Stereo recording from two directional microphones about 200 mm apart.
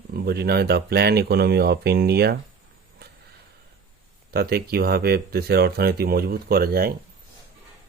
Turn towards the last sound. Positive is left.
turn(degrees=-50)  # may be behind; listen again after turning